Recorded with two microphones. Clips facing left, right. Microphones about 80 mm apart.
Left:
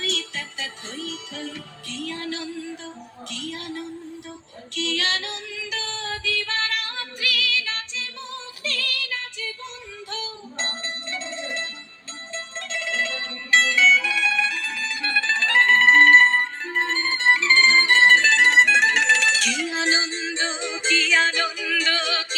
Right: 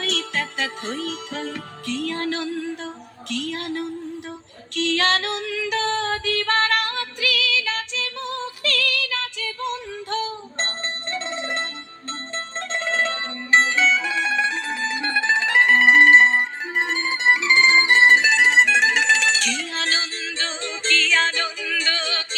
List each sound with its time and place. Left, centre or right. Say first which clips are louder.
0.0 s music: right 4 dB; right
4.7 s female singing: right 6 dB; right
10.1 s music: right 8 dB; right; by 22.4 s centre